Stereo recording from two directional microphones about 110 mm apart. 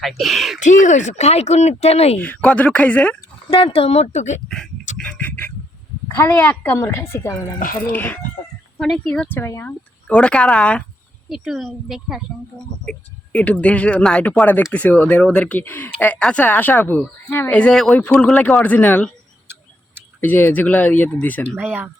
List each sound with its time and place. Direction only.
0.0 s speech: centre (ahead or behind)
0.6 s speech: 90° left; by 2.1 s 70° left (ahead or behind)
2.1 s speech: 15° left (ahead or behind)
3.5 s speech: 60° left (ahead or behind); by 4.4 s 90° left
4.4 s duck: 5° left (ahead or behind)
6.6 s a woman's voice: 20° left (ahead or behind)
8.8 s a woman's voice: 5° left (ahead or behind); by 9.7 s 20° left (ahead or behind)
10.1 s speech: 10° left (ahead or behind)
11.3 s speech: centre (ahead or behind)
12.8 s speech: 10° left (ahead or behind)
20.2 s speech: 15° left (ahead or behind)
21.6 s speech: 15° right (ahead or behind)